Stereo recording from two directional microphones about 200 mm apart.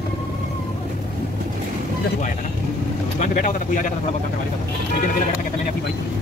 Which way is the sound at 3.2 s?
40° left (ahead or behind).